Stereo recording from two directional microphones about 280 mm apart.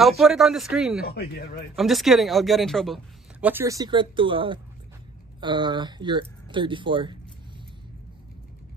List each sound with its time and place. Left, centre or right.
0.0 s speech: centre
1.0 s speech: left
1.8 s speech: centre